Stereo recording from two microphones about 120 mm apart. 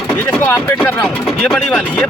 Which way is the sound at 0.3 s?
10° left (ahead or behind).